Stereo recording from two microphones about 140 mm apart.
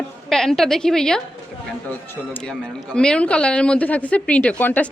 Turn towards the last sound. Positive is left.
turn(degrees=10)  # may be behind; listen again after turning